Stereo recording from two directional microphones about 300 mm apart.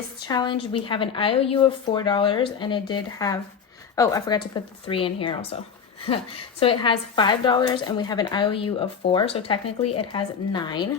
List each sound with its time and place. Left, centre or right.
0.2 s a woman's voice: centre
6.6 s a woman's voice: centre